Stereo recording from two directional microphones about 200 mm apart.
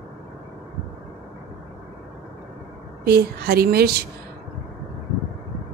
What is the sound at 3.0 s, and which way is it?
A woman's voice, 50° right (ahead or behind).